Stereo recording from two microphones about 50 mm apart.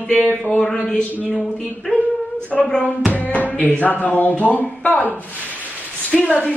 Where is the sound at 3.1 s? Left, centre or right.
Left.